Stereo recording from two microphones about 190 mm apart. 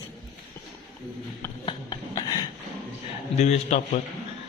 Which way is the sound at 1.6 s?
20° left (ahead or behind).